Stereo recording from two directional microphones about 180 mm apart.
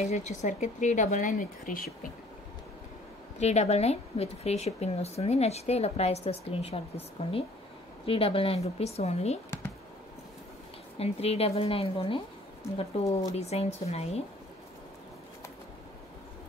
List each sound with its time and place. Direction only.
0.1 s speech: 40° left (ahead or behind)
3.3 s speech: 35° left (ahead or behind)
11.0 s speech: 35° left (ahead or behind)
13.3 s speech: 35° left (ahead or behind)